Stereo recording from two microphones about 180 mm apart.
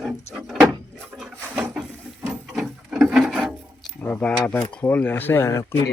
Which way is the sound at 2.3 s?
Centre (ahead or behind).